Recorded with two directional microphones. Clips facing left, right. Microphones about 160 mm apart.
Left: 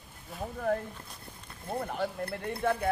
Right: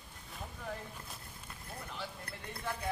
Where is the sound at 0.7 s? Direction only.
55° left (ahead or behind).